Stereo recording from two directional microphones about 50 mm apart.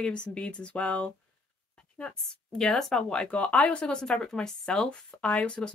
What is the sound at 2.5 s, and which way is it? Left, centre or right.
Speech, centre.